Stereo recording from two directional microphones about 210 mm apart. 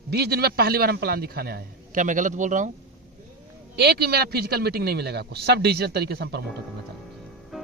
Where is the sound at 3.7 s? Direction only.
50° right (ahead or behind).